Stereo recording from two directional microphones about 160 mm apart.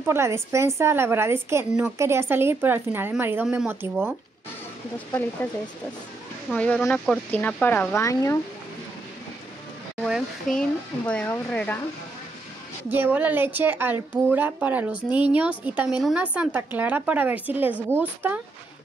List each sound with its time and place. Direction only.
0.0 s a woman's voice: 15° right (ahead or behind)
6.5 s speech: 10° left (ahead or behind)
10.0 s speech: centre (ahead or behind)
12.9 s a woman's voice: 10° right (ahead or behind)